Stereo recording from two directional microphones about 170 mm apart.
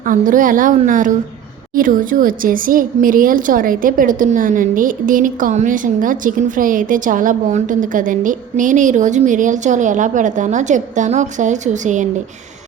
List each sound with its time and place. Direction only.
0.0 s speech: 50° right (ahead or behind)